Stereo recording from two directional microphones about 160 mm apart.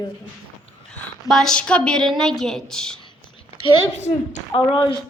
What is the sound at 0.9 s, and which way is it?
A woman's voice, 5° left (ahead or behind).